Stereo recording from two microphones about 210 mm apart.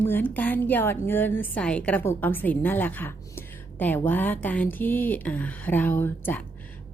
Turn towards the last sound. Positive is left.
turn(degrees=10)  # may be behind; listen again after turning